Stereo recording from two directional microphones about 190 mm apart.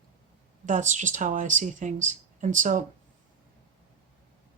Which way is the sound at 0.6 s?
40° right (ahead or behind).